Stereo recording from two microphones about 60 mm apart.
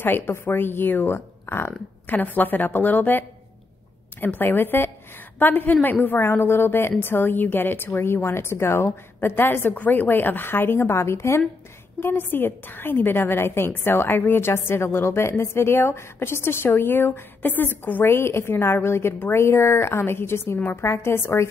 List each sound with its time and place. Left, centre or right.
0.0 s a woman's voice: left
1.7 s a woman's voice: left
18.0 s a woman's voice: left
20.8 s speech: left